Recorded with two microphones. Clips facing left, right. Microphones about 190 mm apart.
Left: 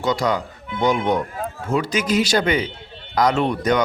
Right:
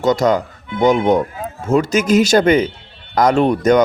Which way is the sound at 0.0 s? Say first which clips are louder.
Right 6 dB; 45° right (ahead or behind).